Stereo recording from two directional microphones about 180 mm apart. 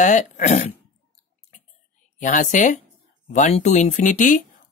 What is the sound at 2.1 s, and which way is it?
Speech, 45° left (ahead or behind).